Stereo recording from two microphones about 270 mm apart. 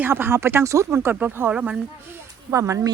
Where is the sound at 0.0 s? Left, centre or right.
Centre.